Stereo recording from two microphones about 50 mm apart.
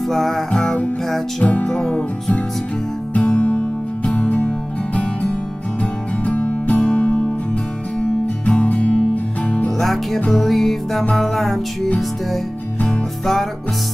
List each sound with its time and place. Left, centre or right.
0.0 s music: centre
3.2 s music: left
8.5 s music: left
9.7 s music: centre